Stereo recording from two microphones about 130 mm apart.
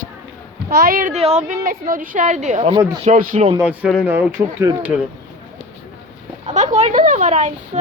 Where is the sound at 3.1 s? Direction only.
80° right.